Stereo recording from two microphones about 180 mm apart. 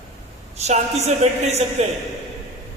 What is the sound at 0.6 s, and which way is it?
A woman's voice, 35° right (ahead or behind).